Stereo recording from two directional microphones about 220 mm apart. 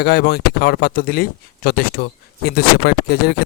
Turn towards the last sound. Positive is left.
turn(degrees=45)  # may be behind; listen again after turning